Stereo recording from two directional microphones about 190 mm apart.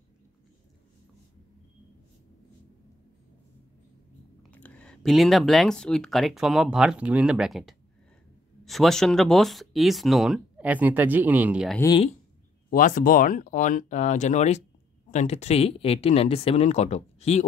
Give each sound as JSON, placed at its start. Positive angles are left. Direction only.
{"t": 4.4, "sound": "speech", "side_deg": 10}
{"t": 11.8, "sound": "speech", "side_deg": 25}
{"t": 12.6, "sound": "speech", "side_deg": 45}